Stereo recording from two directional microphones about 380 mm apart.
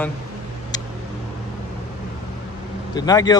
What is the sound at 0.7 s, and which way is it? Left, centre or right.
Tick, centre.